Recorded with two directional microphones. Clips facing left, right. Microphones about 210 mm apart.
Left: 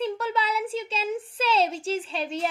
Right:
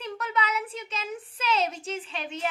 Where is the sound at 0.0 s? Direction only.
30° left (ahead or behind).